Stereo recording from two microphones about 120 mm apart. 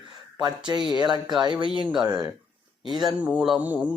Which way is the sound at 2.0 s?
5° right (ahead or behind).